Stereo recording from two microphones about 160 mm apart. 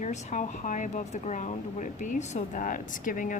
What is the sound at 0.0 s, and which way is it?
Speech, 50° left (ahead or behind).